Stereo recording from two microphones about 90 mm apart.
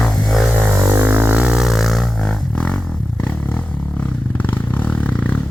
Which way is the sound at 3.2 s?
15° left (ahead or behind).